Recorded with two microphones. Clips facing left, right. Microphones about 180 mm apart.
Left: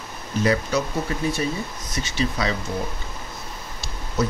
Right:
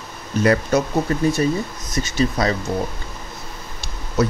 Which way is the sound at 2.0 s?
45° right (ahead or behind).